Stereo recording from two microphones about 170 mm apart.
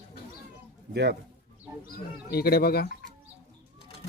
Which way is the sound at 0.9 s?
80° right.